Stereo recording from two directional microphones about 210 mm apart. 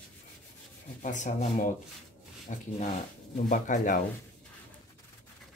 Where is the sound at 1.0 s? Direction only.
35° left (ahead or behind).